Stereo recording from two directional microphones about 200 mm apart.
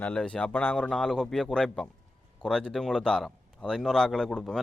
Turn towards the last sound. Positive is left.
turn(degrees=5)  # may be behind; listen again after turning